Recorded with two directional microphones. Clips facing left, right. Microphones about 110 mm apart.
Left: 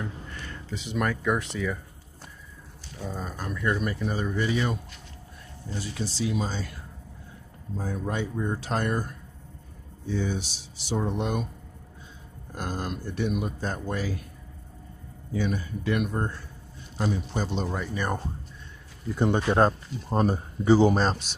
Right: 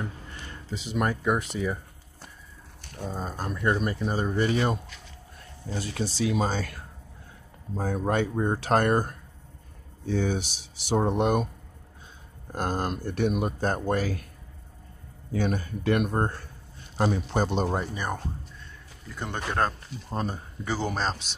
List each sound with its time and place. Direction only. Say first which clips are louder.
0.0 s a sound: left 1 dB; 25° right (ahead or behind)
0.9 s speech: right 1 dB; 25° right (ahead or behind)
2.8 s a sound: right 1 dB; 55° right (ahead or behind)
3.2 s speech: right 2 dB; 30° right (ahead or behind)
4.5 s speech: right 2 dB; 50° right (ahead or behind)
7.7 s speech: right 4 dB; 55° right (ahead or behind)
12.5 s speech: right 4 dB; 50° right (ahead or behind)
15.3 s speech: right 1 dB; 50° right (ahead or behind)
19.1 s speech: left 7 dB; 15° left (ahead or behind)
20.1 s speech: left 7 dB; 35° left (ahead or behind)
20.8 s speech: left 7 dB; 5° left (ahead or behind)